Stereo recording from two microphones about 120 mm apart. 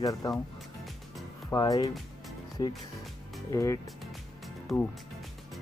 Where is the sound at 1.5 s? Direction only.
30° left (ahead or behind).